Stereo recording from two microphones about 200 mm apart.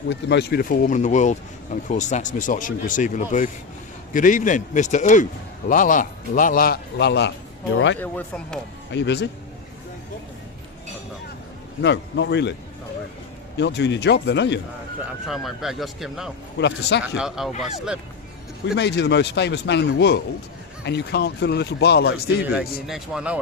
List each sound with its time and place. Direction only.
0.1 s a man's voice: 55° left (ahead or behind)
7.9 s speech: 10° left (ahead or behind)
8.9 s a man's voice: 60° left (ahead or behind)
11.8 s a man's voice: 60° left (ahead or behind)
13.6 s a man's voice: 60° left (ahead or behind)
15.0 s speech: centre (ahead or behind)
16.6 s a man's voice: 60° left (ahead or behind)
17.2 s speech: centre (ahead or behind)
18.8 s a man's voice: 60° left (ahead or behind)
22.4 s speech: 5° right (ahead or behind)